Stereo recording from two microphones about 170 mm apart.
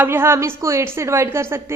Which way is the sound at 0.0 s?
15° right (ahead or behind).